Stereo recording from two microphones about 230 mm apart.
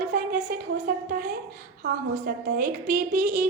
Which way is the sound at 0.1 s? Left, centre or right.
Right.